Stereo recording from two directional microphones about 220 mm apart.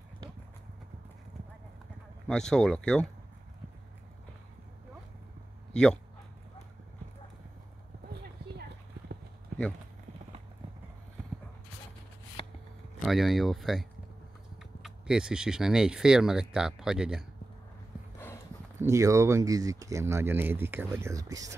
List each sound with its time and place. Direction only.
2.2 s speech: 5° left (ahead or behind)
5.7 s speech: 5° left (ahead or behind)
8.1 s clip-clop: 50° right (ahead or behind)
13.0 s speech: centre (ahead or behind)
18.8 s speech: 15° right (ahead or behind)